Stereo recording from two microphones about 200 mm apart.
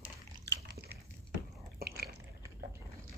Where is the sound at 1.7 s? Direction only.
50° right (ahead or behind).